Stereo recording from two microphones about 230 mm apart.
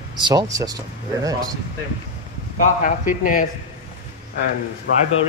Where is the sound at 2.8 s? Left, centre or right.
Left.